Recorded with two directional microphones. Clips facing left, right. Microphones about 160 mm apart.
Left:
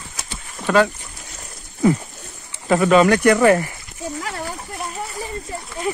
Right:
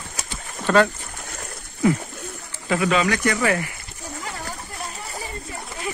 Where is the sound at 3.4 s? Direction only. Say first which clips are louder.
Left 8 dB; 40° left (ahead or behind).